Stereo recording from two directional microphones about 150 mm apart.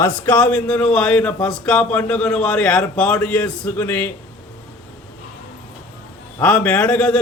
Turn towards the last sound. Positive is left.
turn(degrees=5)  # may be behind; listen again after turning